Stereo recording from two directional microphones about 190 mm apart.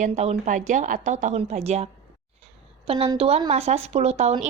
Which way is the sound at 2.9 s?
30° right (ahead or behind).